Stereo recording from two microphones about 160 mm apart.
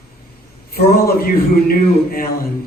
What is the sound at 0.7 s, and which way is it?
A man's voice, 70° left (ahead or behind).